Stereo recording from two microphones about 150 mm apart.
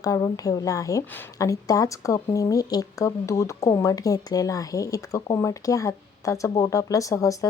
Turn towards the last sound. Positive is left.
turn(degrees=20)  # may be behind; listen again after turning